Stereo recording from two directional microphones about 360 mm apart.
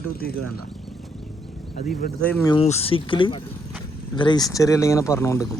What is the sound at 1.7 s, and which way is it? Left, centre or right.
Speech, left.